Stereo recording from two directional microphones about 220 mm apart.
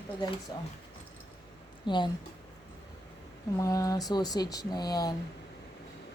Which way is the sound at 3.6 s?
15° left (ahead or behind).